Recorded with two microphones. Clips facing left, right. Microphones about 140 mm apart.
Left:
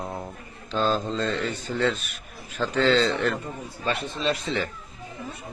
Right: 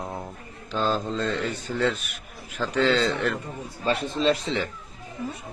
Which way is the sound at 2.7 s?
10° right (ahead or behind).